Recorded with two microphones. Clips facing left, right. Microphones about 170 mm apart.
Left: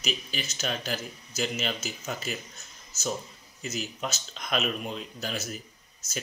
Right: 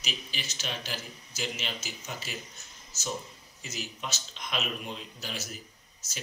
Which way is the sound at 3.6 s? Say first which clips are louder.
Left 5 dB; 45° left (ahead or behind).